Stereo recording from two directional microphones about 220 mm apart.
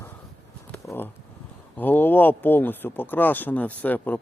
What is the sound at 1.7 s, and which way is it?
Speech, 10° left (ahead or behind).